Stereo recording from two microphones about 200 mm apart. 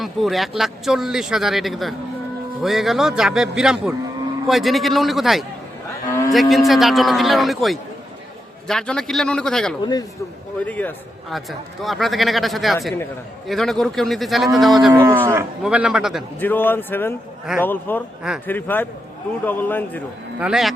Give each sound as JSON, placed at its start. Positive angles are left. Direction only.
{"t": 0.0, "sound": "a man's voice", "side_deg": 0}
{"t": 6.1, "sound": "a sound", "side_deg": 15}
{"t": 6.3, "sound": "a man's voice", "side_deg": 0}
{"t": 15.0, "sound": "cattle", "side_deg": -10}
{"t": 15.6, "sound": "a man's voice", "side_deg": -5}
{"t": 16.4, "sound": "speech", "side_deg": 10}
{"t": 20.4, "sound": "a man's voice", "side_deg": 0}